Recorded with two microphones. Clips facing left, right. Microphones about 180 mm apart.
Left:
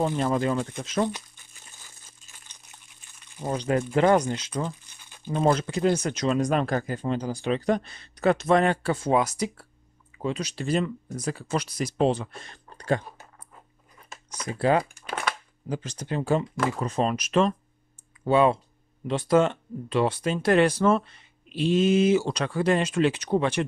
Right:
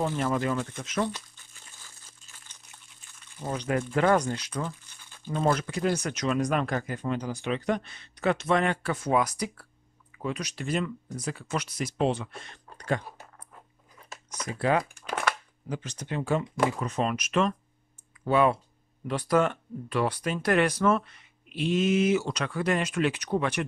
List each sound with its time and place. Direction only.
0.2 s speech: 30° left (ahead or behind)
1.0 s crumpling: 15° left (ahead or behind)
2.3 s a sound: 15° left (ahead or behind)
3.4 s speech: 30° left (ahead or behind)
14.5 s speech: 30° left (ahead or behind)